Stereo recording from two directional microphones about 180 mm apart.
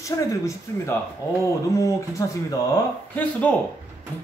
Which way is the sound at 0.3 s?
15° left (ahead or behind).